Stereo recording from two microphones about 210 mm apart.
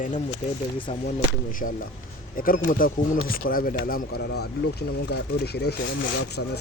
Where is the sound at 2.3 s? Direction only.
40° left (ahead or behind).